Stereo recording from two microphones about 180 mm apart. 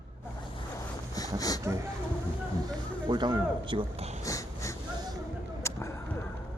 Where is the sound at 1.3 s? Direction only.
20° left (ahead or behind).